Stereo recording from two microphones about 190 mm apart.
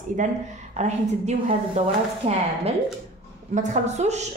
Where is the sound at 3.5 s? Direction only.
40° right (ahead or behind).